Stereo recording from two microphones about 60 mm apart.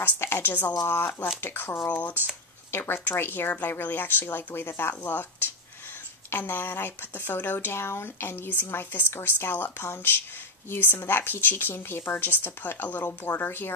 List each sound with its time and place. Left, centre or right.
0.0 s speech: left
1.9 s speech: left